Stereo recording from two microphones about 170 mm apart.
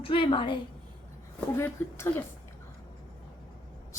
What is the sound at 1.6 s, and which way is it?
Speech, 15° left (ahead or behind).